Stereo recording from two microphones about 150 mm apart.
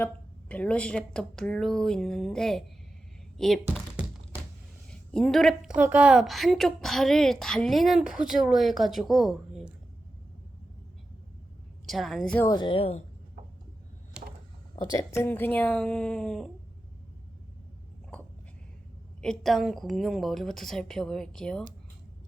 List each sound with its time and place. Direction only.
0.0 s a woman's voice: 10° left (ahead or behind)
11.9 s a woman's voice: centre (ahead or behind)
12.5 s speech: 30° left (ahead or behind)
14.2 s a sound: 5° right (ahead or behind)
14.8 s a woman's voice: 25° left (ahead or behind); by 16.5 s 5° left (ahead or behind)
19.2 s a woman's voice: centre (ahead or behind)